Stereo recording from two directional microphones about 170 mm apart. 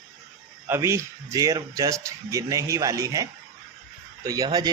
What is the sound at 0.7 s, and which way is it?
Speech, 15° right (ahead or behind).